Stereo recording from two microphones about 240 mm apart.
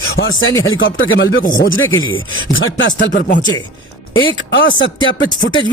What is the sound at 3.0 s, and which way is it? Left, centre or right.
Speech, left.